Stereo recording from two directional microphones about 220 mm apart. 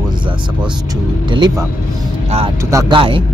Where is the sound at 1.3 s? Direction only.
20° right (ahead or behind).